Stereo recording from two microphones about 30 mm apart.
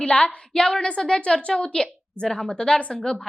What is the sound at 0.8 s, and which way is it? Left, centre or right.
A woman's voice, left.